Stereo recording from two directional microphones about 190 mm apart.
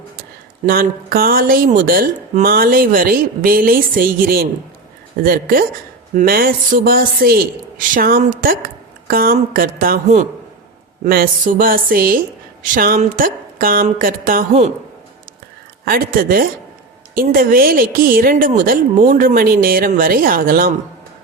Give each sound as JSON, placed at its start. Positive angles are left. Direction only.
{"t": 0.6, "sound": "a woman's voice", "side_deg": -50}
{"t": 13.8, "sound": "a sound", "side_deg": -45}
{"t": 15.8, "sound": "a woman's voice", "side_deg": -50}